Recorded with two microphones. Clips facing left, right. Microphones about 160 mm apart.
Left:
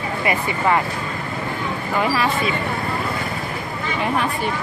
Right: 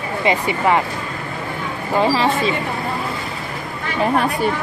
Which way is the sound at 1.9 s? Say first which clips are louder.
Right 4 dB; 25° right (ahead or behind).